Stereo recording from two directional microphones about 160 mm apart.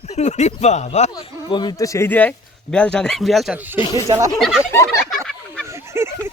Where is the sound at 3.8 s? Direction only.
20° left (ahead or behind).